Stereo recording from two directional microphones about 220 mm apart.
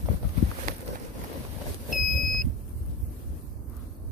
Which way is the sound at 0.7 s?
40° right (ahead or behind).